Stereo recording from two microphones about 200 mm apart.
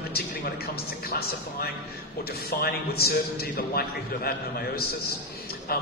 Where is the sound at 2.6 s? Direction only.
50° left (ahead or behind).